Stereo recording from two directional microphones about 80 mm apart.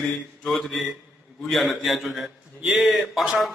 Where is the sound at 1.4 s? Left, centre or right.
Centre.